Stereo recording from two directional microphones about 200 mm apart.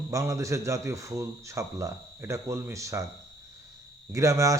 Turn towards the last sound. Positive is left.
turn(degrees=-15)  # may be behind; listen again after turning